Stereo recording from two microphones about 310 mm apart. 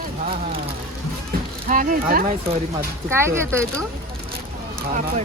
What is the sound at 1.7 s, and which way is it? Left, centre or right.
Speech, right.